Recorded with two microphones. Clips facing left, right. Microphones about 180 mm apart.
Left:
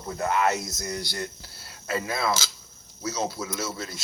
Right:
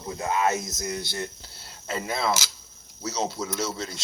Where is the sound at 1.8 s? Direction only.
25° right (ahead or behind).